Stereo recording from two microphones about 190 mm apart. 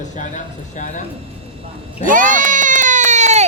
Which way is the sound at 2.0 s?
45° right (ahead or behind).